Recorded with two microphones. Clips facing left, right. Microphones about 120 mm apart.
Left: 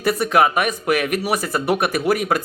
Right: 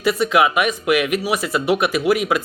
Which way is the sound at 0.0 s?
50° left (ahead or behind).